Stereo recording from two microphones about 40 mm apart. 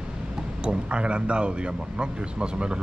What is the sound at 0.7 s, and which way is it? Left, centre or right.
Speech, right.